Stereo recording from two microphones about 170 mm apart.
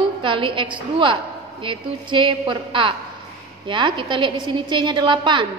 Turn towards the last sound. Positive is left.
turn(degrees=-30)  # may be behind; listen again after turning